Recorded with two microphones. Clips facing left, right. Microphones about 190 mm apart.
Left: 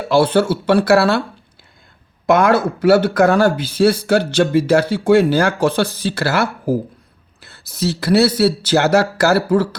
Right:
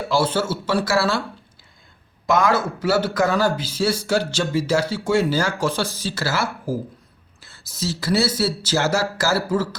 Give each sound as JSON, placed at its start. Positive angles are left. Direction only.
{"t": 0.1, "sound": "speech", "side_deg": 60}
{"t": 2.2, "sound": "speech", "side_deg": 60}